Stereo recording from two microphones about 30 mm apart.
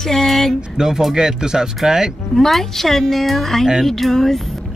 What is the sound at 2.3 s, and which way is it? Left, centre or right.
A woman's voice, centre.